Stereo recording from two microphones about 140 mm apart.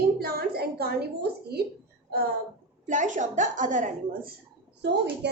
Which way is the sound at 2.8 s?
65° right (ahead or behind).